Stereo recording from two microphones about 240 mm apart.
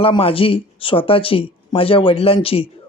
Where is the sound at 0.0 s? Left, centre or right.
Left.